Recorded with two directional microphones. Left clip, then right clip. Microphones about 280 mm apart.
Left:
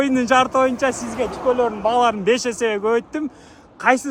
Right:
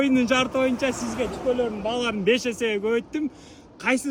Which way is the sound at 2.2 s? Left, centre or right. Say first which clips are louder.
Left 4 dB; centre.